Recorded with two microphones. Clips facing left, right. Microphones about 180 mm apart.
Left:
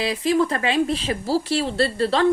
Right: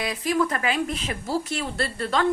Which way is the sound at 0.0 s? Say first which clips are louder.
Left 4 dB; 30° left (ahead or behind).